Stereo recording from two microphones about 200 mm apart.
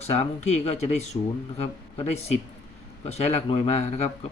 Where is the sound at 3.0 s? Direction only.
30° left (ahead or behind).